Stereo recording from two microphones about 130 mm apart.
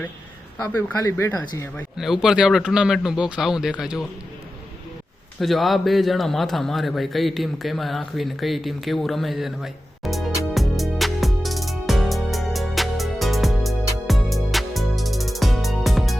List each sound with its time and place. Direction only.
0.6 s speech: 25° left (ahead or behind)
2.0 s a man's voice: 5° right (ahead or behind)
5.4 s a sound: centre (ahead or behind)